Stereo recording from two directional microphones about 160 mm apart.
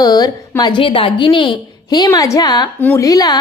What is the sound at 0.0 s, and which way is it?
A woman's voice, 25° left (ahead or behind).